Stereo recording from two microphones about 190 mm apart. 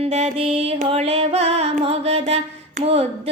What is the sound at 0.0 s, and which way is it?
Music, 35° right (ahead or behind).